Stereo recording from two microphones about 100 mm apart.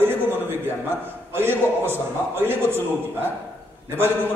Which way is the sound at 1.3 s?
20° right (ahead or behind).